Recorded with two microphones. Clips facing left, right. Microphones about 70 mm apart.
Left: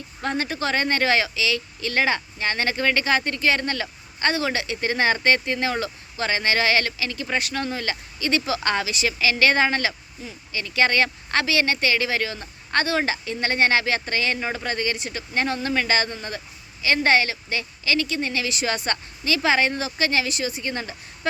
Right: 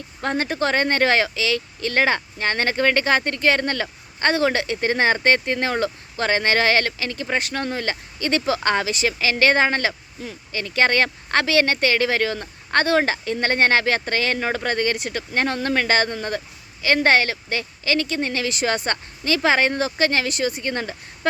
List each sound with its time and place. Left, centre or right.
0.2 s speech: right
10.2 s speech: right
10.5 s speech: right